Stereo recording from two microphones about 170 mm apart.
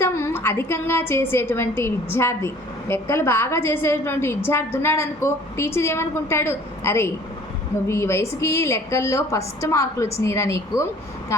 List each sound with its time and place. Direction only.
0.0 s a woman's voice: 15° left (ahead or behind)